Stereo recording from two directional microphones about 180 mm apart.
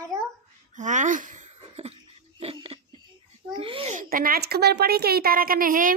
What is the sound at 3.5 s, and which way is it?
Babbling, 30° right (ahead or behind).